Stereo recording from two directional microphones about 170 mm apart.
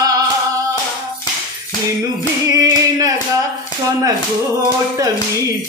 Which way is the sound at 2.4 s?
20° right (ahead or behind).